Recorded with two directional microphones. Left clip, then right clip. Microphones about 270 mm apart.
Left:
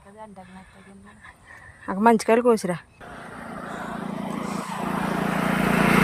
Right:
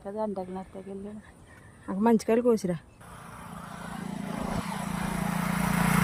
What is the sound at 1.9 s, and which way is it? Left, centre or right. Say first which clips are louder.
Speech: left 7 dB; centre.